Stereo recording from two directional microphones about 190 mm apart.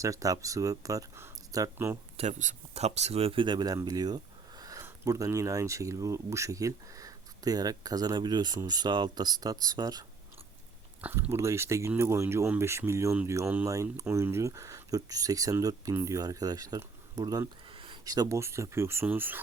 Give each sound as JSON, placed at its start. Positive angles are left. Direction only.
{"t": 0.0, "sound": "speech", "side_deg": -15}
{"t": 2.1, "sound": "speech", "side_deg": -40}